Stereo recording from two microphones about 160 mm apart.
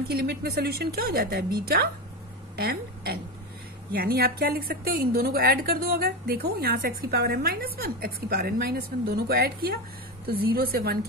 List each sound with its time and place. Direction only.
0.1 s a woman's voice: 75° right (ahead or behind)
3.9 s a woman's voice: 70° right (ahead or behind)